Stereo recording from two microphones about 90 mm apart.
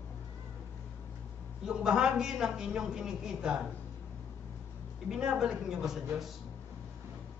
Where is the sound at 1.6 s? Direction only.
5° right (ahead or behind).